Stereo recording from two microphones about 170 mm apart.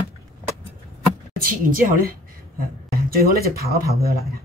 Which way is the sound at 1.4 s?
55° right (ahead or behind).